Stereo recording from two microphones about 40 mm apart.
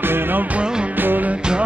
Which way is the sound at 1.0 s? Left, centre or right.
Right.